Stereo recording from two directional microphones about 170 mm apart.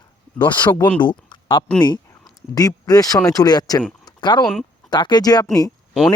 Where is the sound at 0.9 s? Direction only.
25° left (ahead or behind).